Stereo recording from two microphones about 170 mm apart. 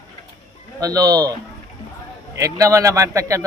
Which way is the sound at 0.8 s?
20° right (ahead or behind).